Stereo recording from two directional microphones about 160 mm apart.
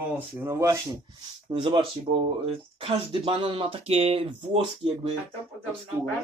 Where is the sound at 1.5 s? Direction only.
30° right (ahead or behind).